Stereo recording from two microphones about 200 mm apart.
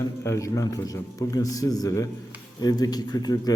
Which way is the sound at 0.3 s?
15° left (ahead or behind).